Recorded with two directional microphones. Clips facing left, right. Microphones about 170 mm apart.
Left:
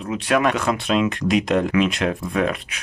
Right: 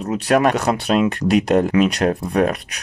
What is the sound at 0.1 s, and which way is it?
Speech, 40° right (ahead or behind).